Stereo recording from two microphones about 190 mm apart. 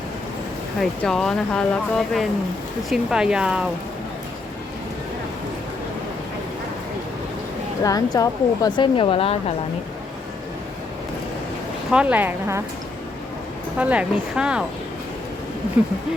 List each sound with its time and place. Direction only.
0.8 s speech: centre (ahead or behind)
7.9 s speech: 20° left (ahead or behind)
11.9 s speech: 5° right (ahead or behind)
13.7 s speech: 5° right (ahead or behind)